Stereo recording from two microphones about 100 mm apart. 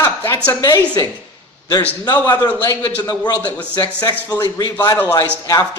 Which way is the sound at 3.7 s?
45° left (ahead or behind).